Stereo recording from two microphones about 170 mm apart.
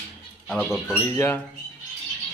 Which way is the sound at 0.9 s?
15° left (ahead or behind).